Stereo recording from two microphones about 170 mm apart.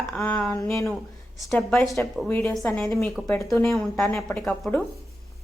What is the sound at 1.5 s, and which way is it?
Speech, 5° left (ahead or behind).